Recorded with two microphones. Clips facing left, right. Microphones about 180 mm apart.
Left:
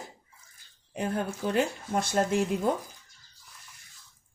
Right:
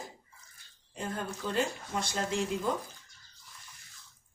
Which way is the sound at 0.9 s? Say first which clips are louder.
Left 6 dB; 65° left (ahead or behind).